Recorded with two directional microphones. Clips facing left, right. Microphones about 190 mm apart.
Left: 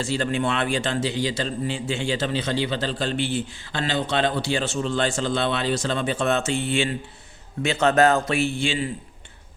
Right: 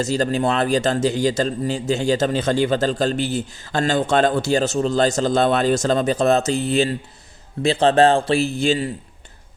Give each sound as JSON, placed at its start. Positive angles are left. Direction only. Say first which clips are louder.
{"t": 0.0, "sound": "a man's voice", "louder": "right 4 dB", "side_deg": -40}